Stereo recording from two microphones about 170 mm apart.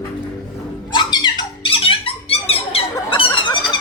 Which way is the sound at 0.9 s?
25° left (ahead or behind).